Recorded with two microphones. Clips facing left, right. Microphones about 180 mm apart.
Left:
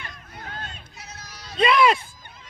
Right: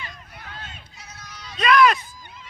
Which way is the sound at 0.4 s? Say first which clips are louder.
Left 4 dB; 45° left (ahead or behind).